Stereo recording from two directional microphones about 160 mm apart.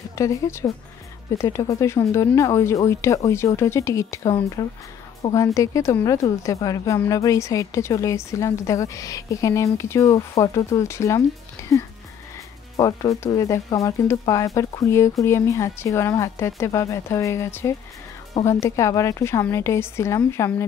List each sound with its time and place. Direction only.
0.1 s speech: 20° left (ahead or behind)